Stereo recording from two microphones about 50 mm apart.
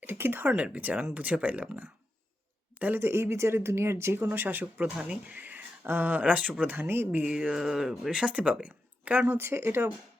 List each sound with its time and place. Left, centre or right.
0.0 s speech: right
2.7 s speech: right
3.0 s speech: right
4.3 s speech: right
4.9 s speech: centre
5.3 s speech: right
7.5 s speech: centre
8.1 s speech: right
8.6 s a sound: right
9.3 s speech: right